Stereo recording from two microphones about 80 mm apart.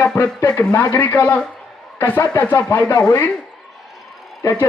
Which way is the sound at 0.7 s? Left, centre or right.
Left.